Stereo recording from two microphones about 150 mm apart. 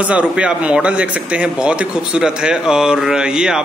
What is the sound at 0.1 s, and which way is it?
A man's voice, 10° right (ahead or behind).